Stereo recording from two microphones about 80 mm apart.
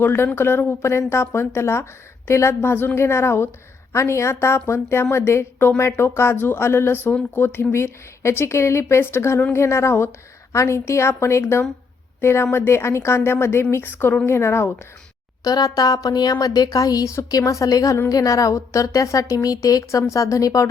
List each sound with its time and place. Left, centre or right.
0.0 s a woman's voice: left
15.4 s a woman's voice: left